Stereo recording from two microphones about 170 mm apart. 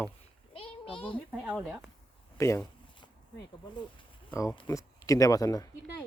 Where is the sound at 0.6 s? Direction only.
30° left (ahead or behind).